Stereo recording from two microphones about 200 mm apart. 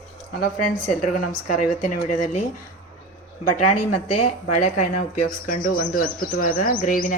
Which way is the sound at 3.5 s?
40° left (ahead or behind).